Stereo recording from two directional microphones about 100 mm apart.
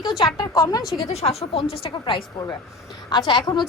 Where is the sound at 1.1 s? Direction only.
85° left; by 1.9 s 65° left (ahead or behind).